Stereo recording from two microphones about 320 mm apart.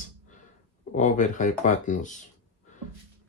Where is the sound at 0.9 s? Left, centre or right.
Left.